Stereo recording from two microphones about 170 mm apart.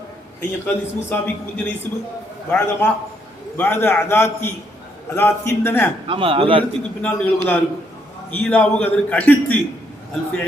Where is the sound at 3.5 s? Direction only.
10° left (ahead or behind).